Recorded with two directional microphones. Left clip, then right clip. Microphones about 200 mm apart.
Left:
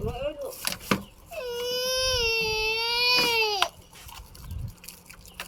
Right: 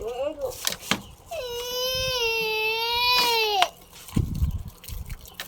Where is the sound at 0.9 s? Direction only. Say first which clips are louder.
Right 1 dB; 35° right (ahead or behind).